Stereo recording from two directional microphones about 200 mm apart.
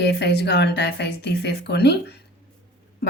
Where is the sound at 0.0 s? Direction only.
60° left (ahead or behind).